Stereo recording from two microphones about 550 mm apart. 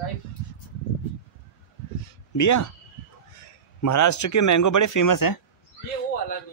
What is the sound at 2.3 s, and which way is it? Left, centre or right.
Speech, left.